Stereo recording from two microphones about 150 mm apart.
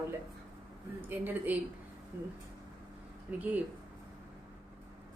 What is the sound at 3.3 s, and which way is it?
Speech, 10° right (ahead or behind).